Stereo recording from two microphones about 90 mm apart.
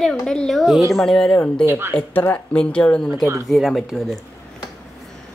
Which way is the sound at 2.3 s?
15° left (ahead or behind).